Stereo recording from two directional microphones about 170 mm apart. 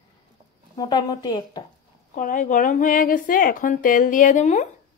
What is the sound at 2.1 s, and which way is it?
Speech, 50° left (ahead or behind).